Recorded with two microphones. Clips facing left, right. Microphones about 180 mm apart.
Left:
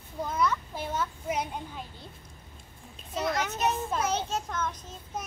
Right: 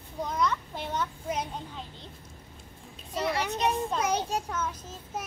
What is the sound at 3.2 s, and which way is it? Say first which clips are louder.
Speech: even; 10° right (ahead or behind).